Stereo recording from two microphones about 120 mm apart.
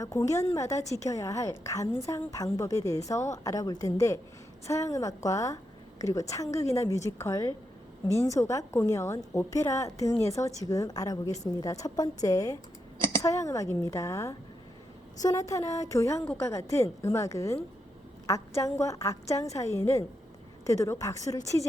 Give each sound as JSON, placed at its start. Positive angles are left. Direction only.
{"t": 0.0, "sound": "a woman's voice", "side_deg": 30}